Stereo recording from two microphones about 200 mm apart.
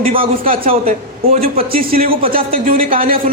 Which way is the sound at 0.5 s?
45° right (ahead or behind).